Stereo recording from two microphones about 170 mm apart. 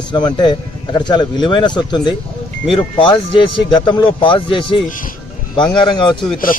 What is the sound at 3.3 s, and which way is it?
A man's voice, 30° left (ahead or behind).